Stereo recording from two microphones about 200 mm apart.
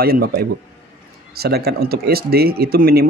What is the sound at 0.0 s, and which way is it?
Speech, 50° right (ahead or behind).